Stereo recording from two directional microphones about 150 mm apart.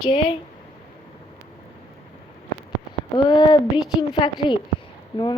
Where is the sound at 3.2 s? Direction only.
30° left (ahead or behind).